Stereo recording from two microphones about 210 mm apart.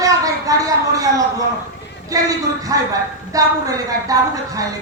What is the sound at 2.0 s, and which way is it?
A woman's voice, 15° right (ahead or behind).